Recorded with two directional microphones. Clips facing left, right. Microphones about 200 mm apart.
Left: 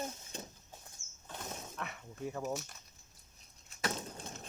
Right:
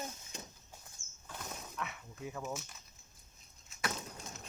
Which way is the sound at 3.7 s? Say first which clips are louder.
Left 2 dB; 30° left (ahead or behind).